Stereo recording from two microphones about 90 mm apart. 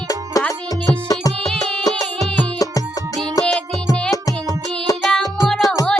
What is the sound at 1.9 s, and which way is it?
Music, 5° left (ahead or behind).